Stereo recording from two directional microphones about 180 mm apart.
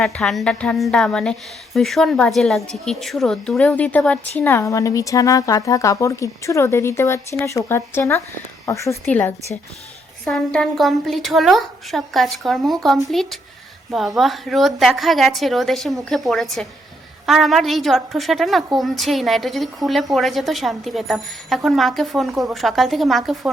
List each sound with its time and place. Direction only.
0.0 s a woman's voice: 5° left (ahead or behind)